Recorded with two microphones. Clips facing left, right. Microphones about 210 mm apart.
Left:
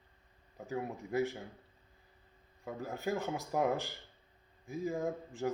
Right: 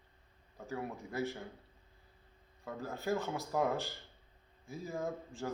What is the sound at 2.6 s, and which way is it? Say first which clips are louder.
Speech: left 1 dB; 15° left (ahead or behind).